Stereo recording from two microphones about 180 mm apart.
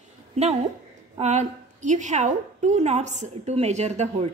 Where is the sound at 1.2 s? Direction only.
40° right (ahead or behind).